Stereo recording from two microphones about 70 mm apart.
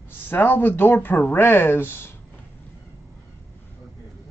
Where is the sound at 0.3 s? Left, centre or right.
Left.